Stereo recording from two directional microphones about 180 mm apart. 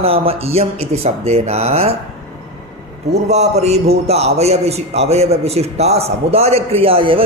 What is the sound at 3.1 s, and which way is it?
A man's voice, 35° right (ahead or behind).